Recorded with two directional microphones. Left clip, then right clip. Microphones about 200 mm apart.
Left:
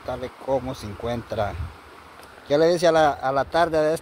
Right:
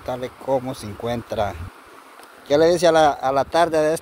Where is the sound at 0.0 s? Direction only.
25° right (ahead or behind).